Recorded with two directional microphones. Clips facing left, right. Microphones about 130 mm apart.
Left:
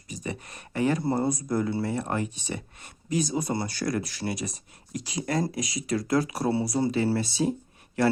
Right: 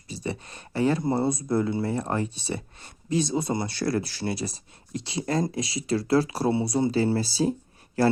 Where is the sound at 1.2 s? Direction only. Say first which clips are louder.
Right 2 dB; 25° right (ahead or behind).